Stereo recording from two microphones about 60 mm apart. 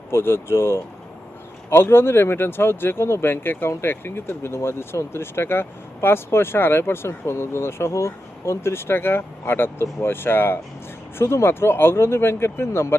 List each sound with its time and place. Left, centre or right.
0.1 s speech: left